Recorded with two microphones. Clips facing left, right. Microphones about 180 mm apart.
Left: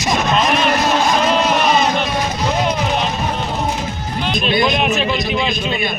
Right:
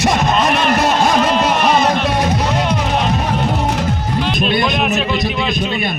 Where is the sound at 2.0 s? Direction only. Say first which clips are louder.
Right 3 dB; 65° right (ahead or behind).